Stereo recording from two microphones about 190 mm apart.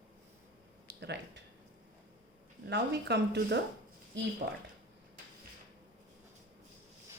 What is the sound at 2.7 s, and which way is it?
Speech, 65° right (ahead or behind).